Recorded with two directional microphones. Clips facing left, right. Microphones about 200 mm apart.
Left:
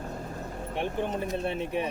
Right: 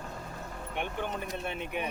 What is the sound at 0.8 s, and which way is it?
Speech, 30° left (ahead or behind).